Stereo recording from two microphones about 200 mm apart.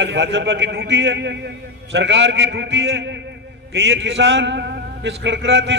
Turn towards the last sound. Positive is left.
turn(degrees=-60)  # may be behind; listen again after turning